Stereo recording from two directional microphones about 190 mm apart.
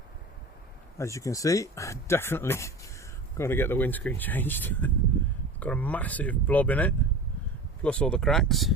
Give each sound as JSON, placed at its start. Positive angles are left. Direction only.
{"t": 0.9, "sound": "speech", "side_deg": 15}